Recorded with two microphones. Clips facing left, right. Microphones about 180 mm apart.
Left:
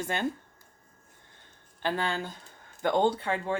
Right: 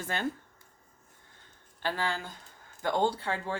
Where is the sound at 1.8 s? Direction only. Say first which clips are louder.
Left 2 dB; 20° left (ahead or behind).